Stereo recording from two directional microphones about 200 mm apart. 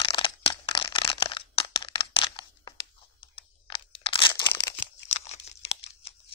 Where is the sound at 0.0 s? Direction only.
25° left (ahead or behind).